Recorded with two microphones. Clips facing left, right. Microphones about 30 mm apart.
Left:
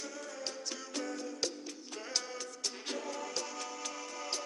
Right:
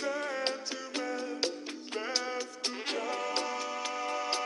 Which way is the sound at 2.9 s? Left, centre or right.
Right.